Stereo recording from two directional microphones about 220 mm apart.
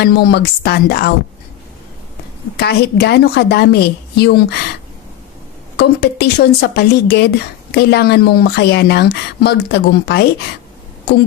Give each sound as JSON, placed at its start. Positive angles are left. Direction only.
{"t": 0.0, "sound": "a woman's voice", "side_deg": 45}
{"t": 2.6, "sound": "a woman's voice", "side_deg": 50}
{"t": 5.7, "sound": "a woman's voice", "side_deg": 50}